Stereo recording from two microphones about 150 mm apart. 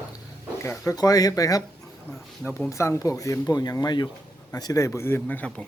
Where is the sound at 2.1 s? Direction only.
10° left (ahead or behind).